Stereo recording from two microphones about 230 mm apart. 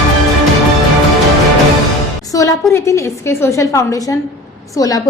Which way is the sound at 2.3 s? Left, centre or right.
Centre.